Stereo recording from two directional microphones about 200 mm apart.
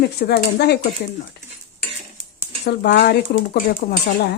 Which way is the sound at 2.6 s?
55° left (ahead or behind).